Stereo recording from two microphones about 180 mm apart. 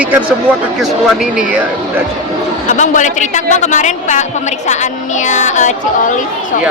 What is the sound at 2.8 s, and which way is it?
Speech, 45° left (ahead or behind).